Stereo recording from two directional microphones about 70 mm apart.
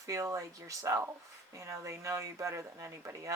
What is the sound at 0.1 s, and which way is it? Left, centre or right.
Speech, right.